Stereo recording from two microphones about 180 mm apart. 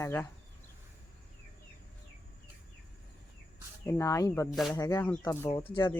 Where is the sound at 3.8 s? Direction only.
15° left (ahead or behind).